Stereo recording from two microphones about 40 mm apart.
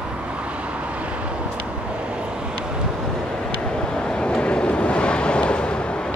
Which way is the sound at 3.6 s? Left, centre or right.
Centre.